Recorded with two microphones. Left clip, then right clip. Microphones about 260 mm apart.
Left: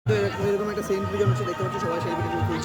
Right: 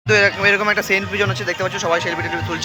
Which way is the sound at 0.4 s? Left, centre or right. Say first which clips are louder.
Right 10 dB; right.